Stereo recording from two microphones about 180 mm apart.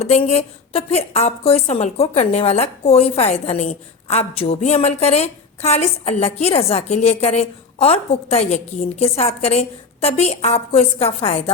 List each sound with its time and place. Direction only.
0.3 s a woman's voice: 35° left (ahead or behind)